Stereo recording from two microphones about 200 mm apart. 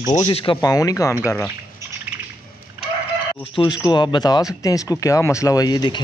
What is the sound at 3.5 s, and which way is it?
A man's voice, 25° left (ahead or behind).